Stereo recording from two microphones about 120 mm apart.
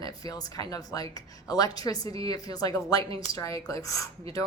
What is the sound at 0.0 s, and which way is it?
Speech, 30° left (ahead or behind).